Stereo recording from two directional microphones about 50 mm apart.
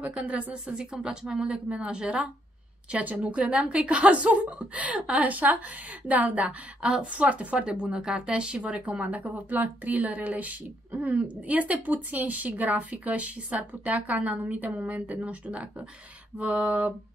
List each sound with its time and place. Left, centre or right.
0.0 s a woman's voice: right
0.7 s a woman's voice: centre
2.9 s a woman's voice: right